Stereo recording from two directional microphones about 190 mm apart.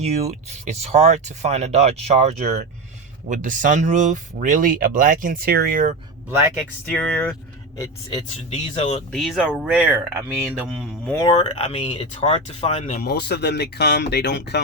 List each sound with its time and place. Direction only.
0.0 s speech: 35° right (ahead or behind)
6.2 s a man's voice: 15° right (ahead or behind)
6.9 s speech: 5° left (ahead or behind)
8.4 s speech: 35° left (ahead or behind)
9.1 s speech: centre (ahead or behind)
11.2 s speech: 25° left (ahead or behind); by 14.6 s 65° left (ahead or behind)